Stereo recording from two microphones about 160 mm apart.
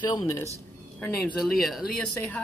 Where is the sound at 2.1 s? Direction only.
15° left (ahead or behind).